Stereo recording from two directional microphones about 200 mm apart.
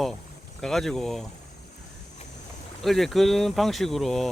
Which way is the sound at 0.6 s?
Centre (ahead or behind).